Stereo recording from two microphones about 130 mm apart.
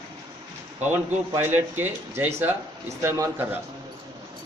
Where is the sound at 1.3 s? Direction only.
15° right (ahead or behind).